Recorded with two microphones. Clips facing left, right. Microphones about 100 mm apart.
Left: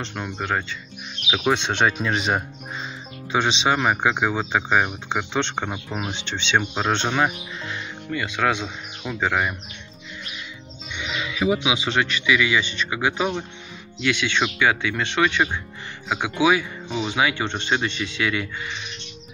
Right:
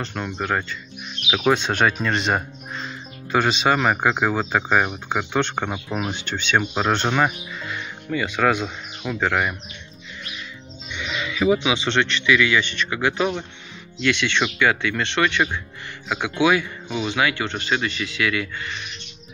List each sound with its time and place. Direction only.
0.0 s speech: 5° left (ahead or behind)
11.0 s speech: 15° left (ahead or behind)